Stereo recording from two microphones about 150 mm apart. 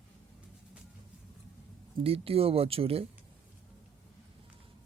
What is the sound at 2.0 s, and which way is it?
Speech, 40° right (ahead or behind).